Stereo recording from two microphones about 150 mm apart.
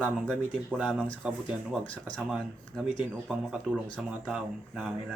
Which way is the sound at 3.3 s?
5° right (ahead or behind).